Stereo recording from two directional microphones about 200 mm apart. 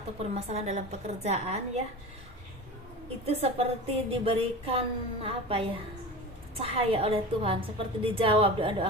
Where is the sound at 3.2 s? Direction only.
30° right (ahead or behind).